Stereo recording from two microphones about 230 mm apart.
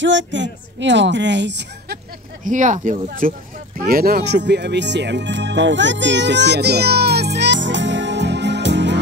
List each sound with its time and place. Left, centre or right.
0.0 s speech: right
2.4 s speech: right